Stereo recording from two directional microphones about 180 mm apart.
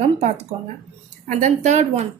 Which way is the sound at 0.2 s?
40° right (ahead or behind).